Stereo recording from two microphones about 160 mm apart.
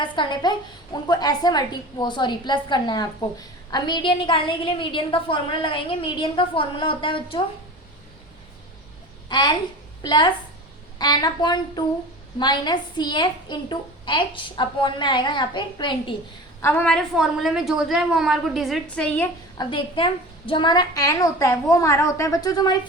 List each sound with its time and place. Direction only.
0.0 s a child's voice: 30° left (ahead or behind)
9.3 s a child's voice: 25° left (ahead or behind)
16.6 s a woman's voice: 15° left (ahead or behind)
19.5 s a woman's voice: 30° left (ahead or behind)